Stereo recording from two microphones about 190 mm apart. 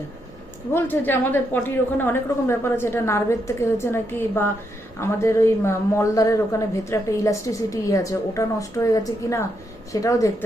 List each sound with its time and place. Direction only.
0.7 s a woman's voice: 10° left (ahead or behind)